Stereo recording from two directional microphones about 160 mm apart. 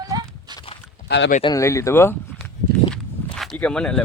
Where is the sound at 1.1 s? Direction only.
90° left.